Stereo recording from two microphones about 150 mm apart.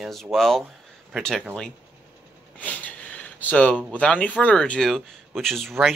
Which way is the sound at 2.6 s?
10° left (ahead or behind).